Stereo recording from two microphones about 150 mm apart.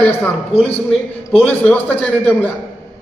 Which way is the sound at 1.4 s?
10° left (ahead or behind).